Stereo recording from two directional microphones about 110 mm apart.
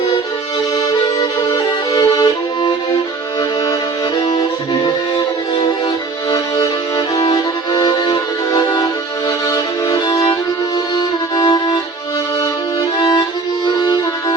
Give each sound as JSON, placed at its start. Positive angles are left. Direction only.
{"t": 1.2, "sound": "music", "side_deg": 35}
{"t": 4.3, "sound": "music", "side_deg": 40}
{"t": 7.2, "sound": "music", "side_deg": 35}
{"t": 10.9, "sound": "violin", "side_deg": 35}
{"t": 13.7, "sound": "music", "side_deg": 40}